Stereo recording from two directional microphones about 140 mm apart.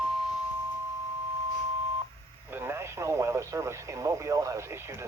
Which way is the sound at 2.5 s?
15° right (ahead or behind).